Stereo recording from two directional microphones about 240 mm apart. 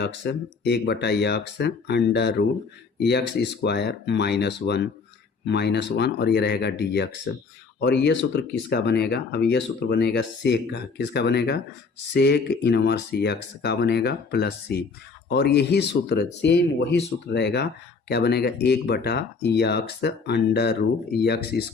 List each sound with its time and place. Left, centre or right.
0.0 s speech: left